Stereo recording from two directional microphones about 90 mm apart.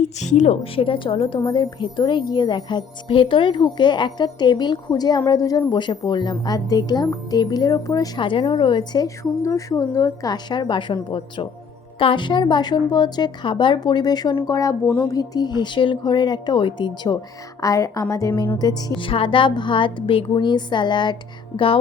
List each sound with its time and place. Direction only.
0.6 s a woman's voice: 85° left
1.5 s music: 60° left (ahead or behind)
5.3 s a woman's voice: 45° left (ahead or behind)
5.7 s a woman's voice: 55° left (ahead or behind)
8.2 s music: 70° left (ahead or behind); by 9.0 s 50° left (ahead or behind)
9.0 s a woman's voice: 35° left (ahead or behind); by 10.9 s 60° left (ahead or behind)
11.9 s music: 70° left (ahead or behind); by 14.3 s 50° left (ahead or behind)
14.4 s a woman's voice: 40° left (ahead or behind)
15.0 s music: 45° left (ahead or behind); by 17.2 s 60° left (ahead or behind)
17.6 s a woman's voice: 40° left (ahead or behind)
18.9 s a woman's voice: 75° left (ahead or behind)